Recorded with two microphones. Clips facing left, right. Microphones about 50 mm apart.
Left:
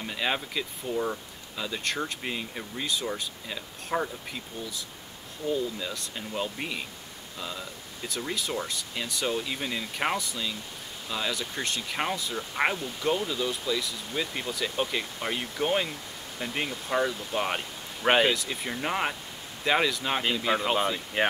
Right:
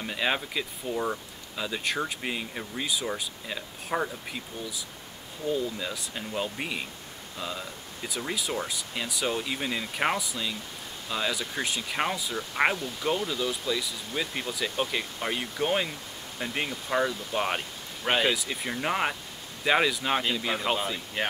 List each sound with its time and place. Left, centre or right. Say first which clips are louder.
0.0 s speech: right 1 dB; centre
21.2 s speech: left 4 dB; centre